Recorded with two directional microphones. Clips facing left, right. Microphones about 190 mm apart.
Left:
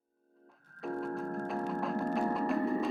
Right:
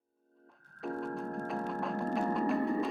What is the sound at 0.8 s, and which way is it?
Music, centre (ahead or behind).